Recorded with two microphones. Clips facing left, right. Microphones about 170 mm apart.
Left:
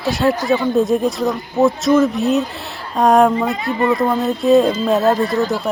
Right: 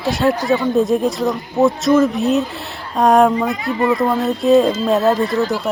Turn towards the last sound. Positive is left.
turn(degrees=0)  # may be behind; listen again after turning